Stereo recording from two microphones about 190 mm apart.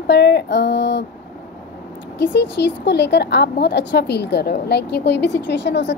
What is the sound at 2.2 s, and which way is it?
A woman's voice, 65° left (ahead or behind).